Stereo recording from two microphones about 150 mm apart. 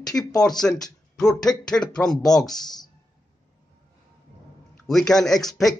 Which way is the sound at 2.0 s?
5° left (ahead or behind).